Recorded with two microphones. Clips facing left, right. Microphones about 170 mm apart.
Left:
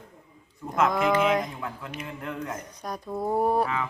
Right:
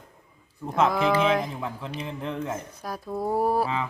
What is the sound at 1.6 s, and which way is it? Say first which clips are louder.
Speech: right 3 dB; 30° right (ahead or behind).